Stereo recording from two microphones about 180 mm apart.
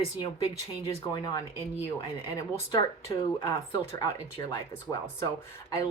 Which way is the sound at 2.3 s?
20° left (ahead or behind).